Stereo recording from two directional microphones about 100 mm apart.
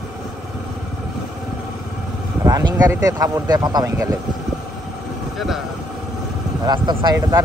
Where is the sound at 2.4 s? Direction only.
35° right (ahead or behind).